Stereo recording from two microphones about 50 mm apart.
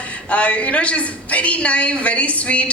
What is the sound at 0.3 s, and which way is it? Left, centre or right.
A woman's voice, left.